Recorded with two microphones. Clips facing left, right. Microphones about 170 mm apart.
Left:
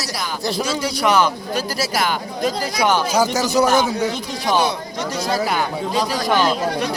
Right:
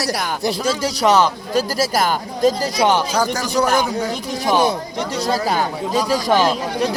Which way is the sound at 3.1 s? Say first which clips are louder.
Left 2 dB; 10° left (ahead or behind).